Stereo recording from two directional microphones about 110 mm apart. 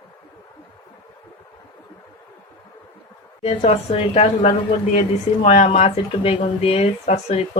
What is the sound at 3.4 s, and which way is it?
A woman's voice, 75° left (ahead or behind).